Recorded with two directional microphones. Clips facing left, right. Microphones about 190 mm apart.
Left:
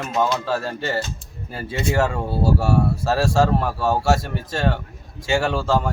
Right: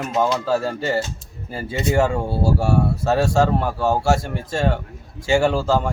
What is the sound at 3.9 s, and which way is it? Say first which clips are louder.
Speech: even; 25° right (ahead or behind).